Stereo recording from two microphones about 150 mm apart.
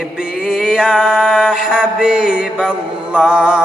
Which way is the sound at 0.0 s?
5° right (ahead or behind).